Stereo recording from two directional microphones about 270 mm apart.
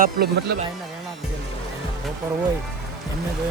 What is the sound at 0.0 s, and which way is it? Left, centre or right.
Speech, right.